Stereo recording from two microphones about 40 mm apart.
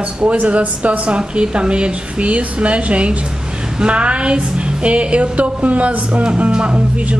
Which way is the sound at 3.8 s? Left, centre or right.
Right.